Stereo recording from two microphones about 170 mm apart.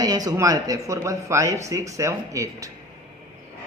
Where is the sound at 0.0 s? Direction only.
20° right (ahead or behind).